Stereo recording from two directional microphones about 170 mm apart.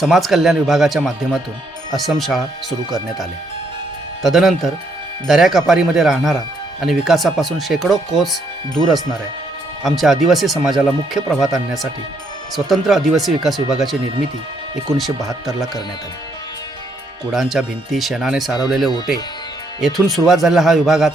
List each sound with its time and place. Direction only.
0.0 s speech: centre (ahead or behind)
17.3 s speech: centre (ahead or behind)
19.8 s speech: centre (ahead or behind)